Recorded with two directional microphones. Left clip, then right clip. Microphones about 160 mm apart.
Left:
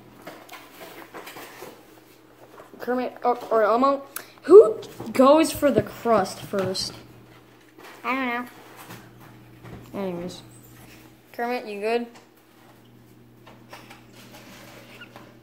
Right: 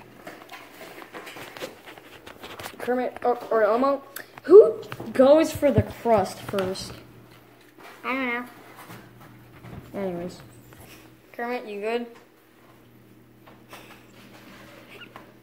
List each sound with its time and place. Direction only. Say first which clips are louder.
2.9 s speech: even; 10° left (ahead or behind)
5.1 s a woman's voice: even; 25° left (ahead or behind)
8.0 s a woman's voice: left 1 dB; 20° left (ahead or behind)
9.9 s speech: even; 15° left (ahead or behind)
11.3 s a woman's voice: left 2 dB; 25° left (ahead or behind)